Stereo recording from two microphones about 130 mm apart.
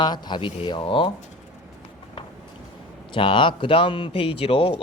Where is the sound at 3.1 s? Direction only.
40° left (ahead or behind).